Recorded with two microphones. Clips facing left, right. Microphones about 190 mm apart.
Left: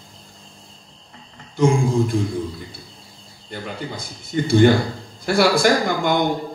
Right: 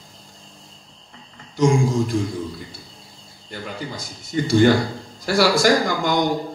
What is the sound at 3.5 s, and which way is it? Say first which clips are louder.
A man's voice: left 1 dB; 55° left (ahead or behind).